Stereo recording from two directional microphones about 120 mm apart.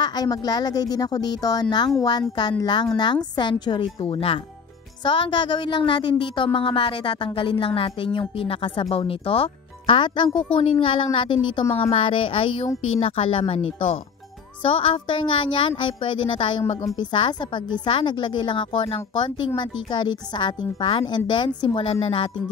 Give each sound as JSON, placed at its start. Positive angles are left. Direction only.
{"t": 0.0, "sound": "a woman's voice", "side_deg": 35}